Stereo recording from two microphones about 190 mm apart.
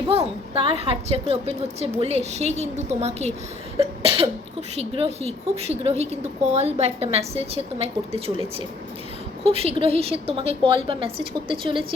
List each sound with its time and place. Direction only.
0.1 s a woman's voice: 30° right (ahead or behind)
3.8 s cough: 30° right (ahead or behind)
4.8 s a woman's voice: 35° right (ahead or behind)